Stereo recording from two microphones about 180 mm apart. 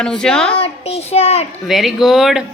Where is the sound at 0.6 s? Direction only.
35° left (ahead or behind).